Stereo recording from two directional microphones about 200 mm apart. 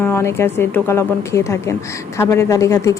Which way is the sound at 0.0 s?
10° left (ahead or behind).